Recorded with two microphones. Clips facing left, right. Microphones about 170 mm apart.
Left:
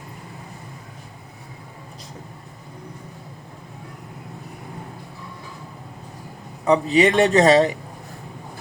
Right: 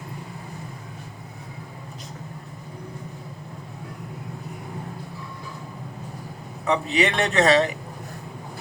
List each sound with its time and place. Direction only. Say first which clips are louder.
6.7 s speech: left 6 dB; 35° left (ahead or behind)